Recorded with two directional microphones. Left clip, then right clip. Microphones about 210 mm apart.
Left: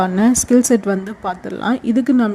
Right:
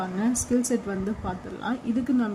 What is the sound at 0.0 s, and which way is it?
Speech, 50° left (ahead or behind).